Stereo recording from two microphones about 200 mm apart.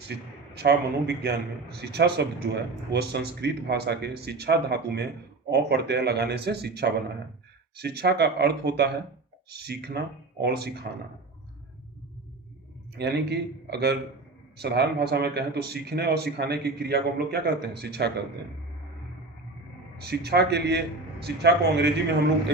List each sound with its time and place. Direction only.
0.5 s a man's voice: 55° right (ahead or behind)
13.0 s a man's voice: 55° right (ahead or behind)
20.0 s a man's voice: 55° right (ahead or behind)